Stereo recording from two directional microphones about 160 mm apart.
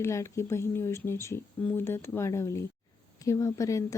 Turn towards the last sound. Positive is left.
turn(degrees=20)  # may be behind; listen again after turning